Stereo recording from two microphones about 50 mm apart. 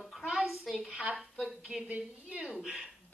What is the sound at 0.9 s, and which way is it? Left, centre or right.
Speech, right.